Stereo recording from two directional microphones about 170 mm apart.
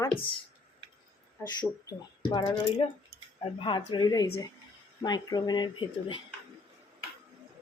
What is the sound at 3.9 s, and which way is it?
Speech, 25° left (ahead or behind).